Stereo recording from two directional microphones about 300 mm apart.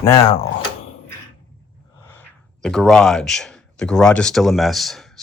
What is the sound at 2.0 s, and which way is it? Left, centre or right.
Speech, centre.